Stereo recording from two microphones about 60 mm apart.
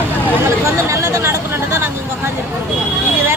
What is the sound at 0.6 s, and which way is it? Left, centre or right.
Chatter, right.